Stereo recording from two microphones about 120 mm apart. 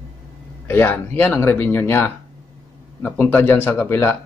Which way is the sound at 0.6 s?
15° left (ahead or behind).